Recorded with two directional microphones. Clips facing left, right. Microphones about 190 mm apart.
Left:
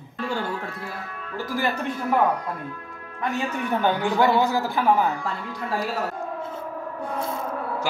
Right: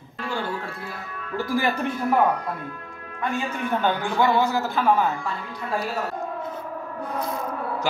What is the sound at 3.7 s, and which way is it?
Speech, 15° left (ahead or behind).